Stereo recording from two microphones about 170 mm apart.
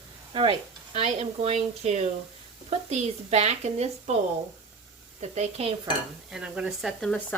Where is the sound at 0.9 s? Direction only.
40° right (ahead or behind).